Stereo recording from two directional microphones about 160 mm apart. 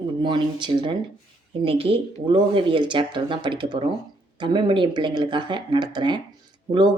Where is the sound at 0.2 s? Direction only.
30° right (ahead or behind).